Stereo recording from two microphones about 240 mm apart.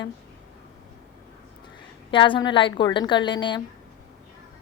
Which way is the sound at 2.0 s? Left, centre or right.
Centre.